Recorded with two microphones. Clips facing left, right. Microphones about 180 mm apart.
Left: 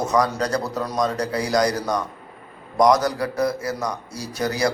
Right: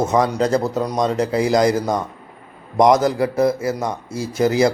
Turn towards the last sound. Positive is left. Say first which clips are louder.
# right 6 dB
turn(degrees=-25)  # may be behind; listen again after turning